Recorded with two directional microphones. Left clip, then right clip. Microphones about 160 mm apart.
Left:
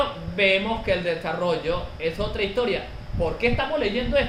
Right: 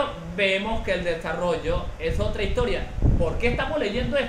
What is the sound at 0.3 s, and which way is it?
A man's voice, 15° left (ahead or behind).